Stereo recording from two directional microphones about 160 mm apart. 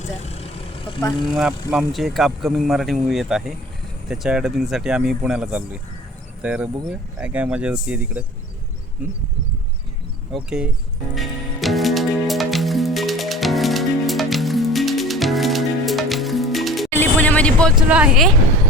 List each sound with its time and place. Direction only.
0.0 s vehicle: 45° left (ahead or behind)
1.3 s speech: centre (ahead or behind)
10.3 s speech: 5° right (ahead or behind)
11.1 s music: centre (ahead or behind)
16.9 s vehicle: 10° left (ahead or behind)
17.7 s speech: 5° right (ahead or behind)